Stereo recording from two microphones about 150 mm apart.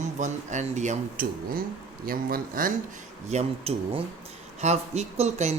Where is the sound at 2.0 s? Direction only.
70° right (ahead or behind).